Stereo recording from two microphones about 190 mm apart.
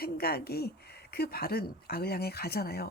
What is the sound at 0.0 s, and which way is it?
Speech, 55° left (ahead or behind).